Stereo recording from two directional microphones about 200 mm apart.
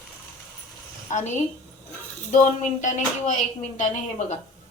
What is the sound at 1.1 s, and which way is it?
A woman's voice, 35° left (ahead or behind).